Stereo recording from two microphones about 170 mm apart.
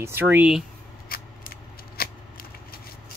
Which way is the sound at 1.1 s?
60° left (ahead or behind).